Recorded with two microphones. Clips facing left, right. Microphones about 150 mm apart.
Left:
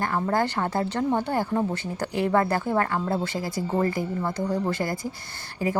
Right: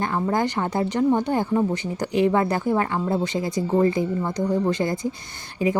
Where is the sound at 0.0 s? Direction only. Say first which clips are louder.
Right 2 dB; 20° right (ahead or behind).